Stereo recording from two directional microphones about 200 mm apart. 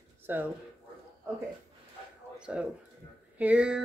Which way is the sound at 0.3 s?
10° right (ahead or behind).